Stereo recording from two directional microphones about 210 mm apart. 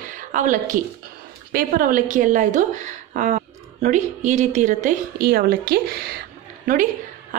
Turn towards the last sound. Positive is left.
turn(degrees=-40)  # may be behind; listen again after turning